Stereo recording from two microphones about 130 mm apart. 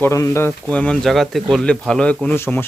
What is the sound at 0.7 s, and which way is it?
A man's voice, 10° left (ahead or behind).